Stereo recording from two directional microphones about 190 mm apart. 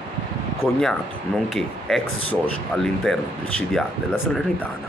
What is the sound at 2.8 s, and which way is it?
Speech, centre (ahead or behind).